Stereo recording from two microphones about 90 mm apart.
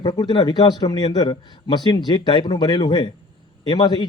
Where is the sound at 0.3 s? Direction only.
55° left (ahead or behind).